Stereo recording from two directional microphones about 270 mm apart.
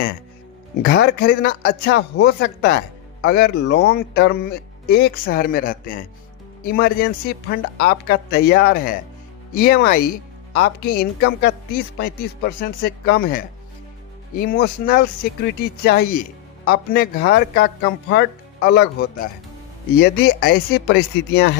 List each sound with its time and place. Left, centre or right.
0.8 s speech: left